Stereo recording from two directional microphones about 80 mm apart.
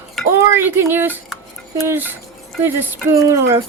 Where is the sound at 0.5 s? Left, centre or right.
Right.